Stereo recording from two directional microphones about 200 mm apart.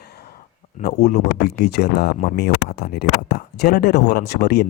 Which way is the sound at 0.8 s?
50° left (ahead or behind).